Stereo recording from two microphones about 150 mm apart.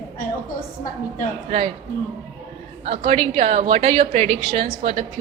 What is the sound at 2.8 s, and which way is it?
A woman's voice, 40° right (ahead or behind).